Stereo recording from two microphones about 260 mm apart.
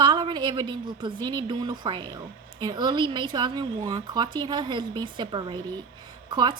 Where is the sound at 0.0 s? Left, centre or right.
Centre.